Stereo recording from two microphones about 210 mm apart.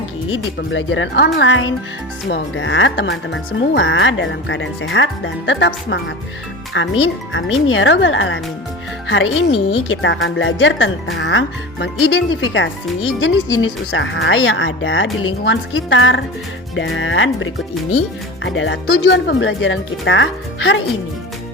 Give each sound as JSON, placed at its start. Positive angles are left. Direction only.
{"t": 0.3, "sound": "a woman's voice", "side_deg": 65}